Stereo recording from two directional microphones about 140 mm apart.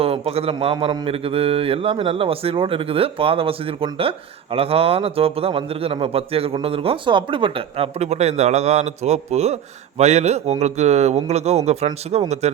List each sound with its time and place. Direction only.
0.0 s mantra: 45° right (ahead or behind)
4.5 s a man's voice: 45° right (ahead or behind)